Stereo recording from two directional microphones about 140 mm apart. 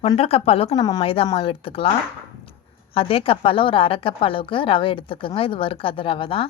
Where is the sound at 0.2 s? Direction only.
45° left (ahead or behind).